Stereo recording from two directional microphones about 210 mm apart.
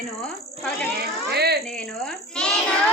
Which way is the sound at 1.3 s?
50° right (ahead or behind).